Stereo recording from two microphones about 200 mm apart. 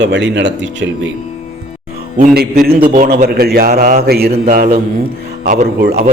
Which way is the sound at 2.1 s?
50° right (ahead or behind).